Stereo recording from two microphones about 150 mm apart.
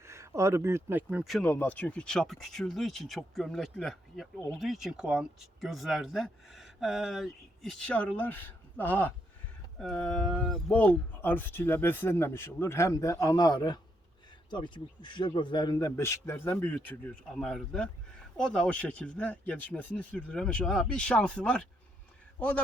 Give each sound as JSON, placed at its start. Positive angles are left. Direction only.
{"t": 0.0, "sound": "speech", "side_deg": -20}
{"t": 1.2, "sound": "speech", "side_deg": 0}
{"t": 1.5, "sound": "a man's voice", "side_deg": 10}